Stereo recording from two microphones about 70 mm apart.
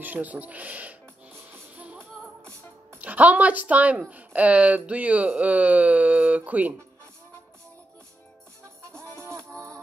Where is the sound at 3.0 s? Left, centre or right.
Right.